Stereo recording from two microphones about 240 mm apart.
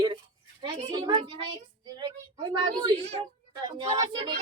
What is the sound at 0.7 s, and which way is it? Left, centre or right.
A woman's voice, right.